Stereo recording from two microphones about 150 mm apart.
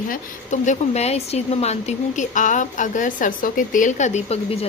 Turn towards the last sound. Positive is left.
turn(degrees=45)  # may be behind; listen again after turning